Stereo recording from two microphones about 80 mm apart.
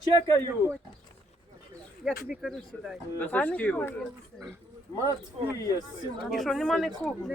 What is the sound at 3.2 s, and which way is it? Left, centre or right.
Speech, centre.